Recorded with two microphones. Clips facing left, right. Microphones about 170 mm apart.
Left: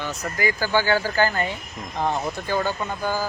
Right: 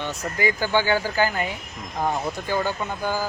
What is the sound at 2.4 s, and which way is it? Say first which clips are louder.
Speech: left 1 dB; 15° right (ahead or behind).